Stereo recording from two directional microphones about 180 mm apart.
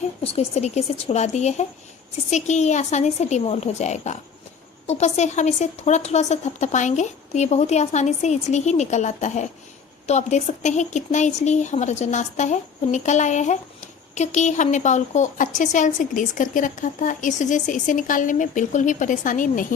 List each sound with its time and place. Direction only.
0.2 s a woman's voice: 35° left (ahead or behind)